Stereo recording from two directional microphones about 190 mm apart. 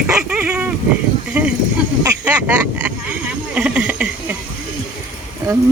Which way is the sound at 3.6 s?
5° right (ahead or behind).